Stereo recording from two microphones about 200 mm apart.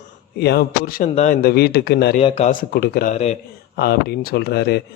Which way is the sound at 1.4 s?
50° left (ahead or behind).